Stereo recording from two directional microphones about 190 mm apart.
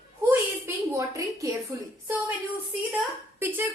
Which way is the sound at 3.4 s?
10° right (ahead or behind).